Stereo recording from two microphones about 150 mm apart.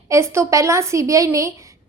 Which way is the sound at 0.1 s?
20° right (ahead or behind).